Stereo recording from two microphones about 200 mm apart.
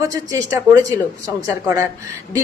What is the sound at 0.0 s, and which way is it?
A woman's voice, 15° right (ahead or behind).